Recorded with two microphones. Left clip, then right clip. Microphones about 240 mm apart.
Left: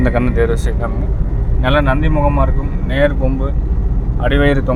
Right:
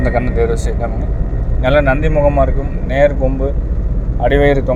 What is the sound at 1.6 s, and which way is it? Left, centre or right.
Speech, centre.